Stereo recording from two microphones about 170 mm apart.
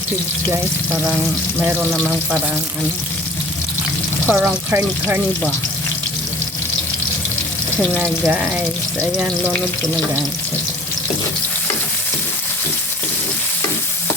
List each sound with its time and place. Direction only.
4.3 s speech: 5° right (ahead or behind)